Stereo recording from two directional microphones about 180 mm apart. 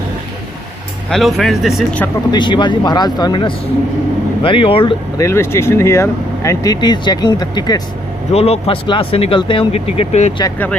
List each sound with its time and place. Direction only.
1.1 s speech: centre (ahead or behind)
2.3 s speech: 25° left (ahead or behind)
5.1 s speech: 15° left (ahead or behind)
8.3 s speech: 35° left (ahead or behind)